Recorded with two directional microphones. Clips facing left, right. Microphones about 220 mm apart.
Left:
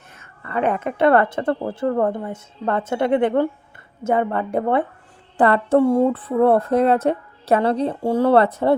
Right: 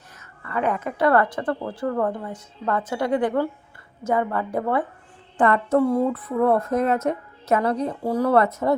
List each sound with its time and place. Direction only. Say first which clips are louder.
0.4 s a woman's voice: left 3 dB; 25° left (ahead or behind)